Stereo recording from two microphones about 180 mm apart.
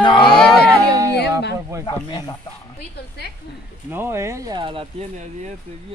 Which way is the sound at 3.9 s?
15° right (ahead or behind).